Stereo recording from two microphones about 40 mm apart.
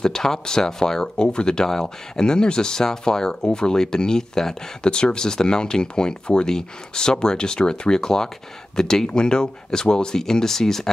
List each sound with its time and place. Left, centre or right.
0.0 s speech: centre